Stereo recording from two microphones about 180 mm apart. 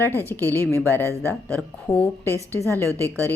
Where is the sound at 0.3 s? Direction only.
10° left (ahead or behind).